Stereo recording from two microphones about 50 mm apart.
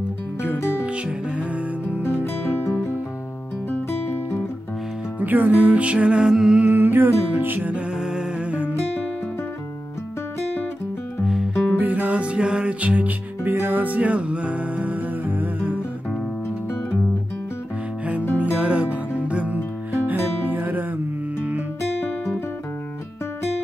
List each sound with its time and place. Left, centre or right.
0.8 s music: right
2.0 s music: left
4.0 s music: left
5.2 s music: right; by 6.6 s centre
6.6 s music: right
7.9 s music: centre
8.5 s music: right
11.8 s music: right
12.8 s music: right
18.4 s music: right